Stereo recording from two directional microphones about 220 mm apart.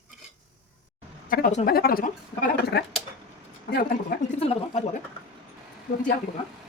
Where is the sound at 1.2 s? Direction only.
40° left (ahead or behind).